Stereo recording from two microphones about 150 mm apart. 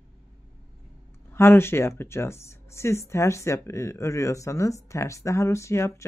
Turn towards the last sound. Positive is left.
turn(degrees=20)  # may be behind; listen again after turning